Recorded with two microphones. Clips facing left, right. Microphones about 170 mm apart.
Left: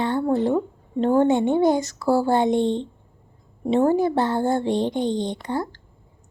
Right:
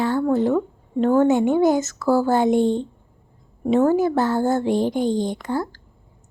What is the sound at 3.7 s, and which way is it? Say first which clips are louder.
A woman's voice: right 1 dB; 30° left (ahead or behind).